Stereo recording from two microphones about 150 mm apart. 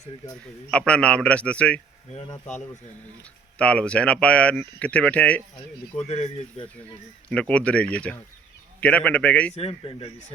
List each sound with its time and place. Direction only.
0.7 s speech: 5° left (ahead or behind)
3.6 s speech: 10° left (ahead or behind)
6.0 s speech: 45° left (ahead or behind)
7.3 s speech: 10° left (ahead or behind)
9.6 s speech: 40° left (ahead or behind)